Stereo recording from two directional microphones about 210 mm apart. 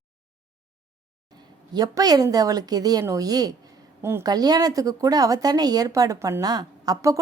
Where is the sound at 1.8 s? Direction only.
20° right (ahead or behind).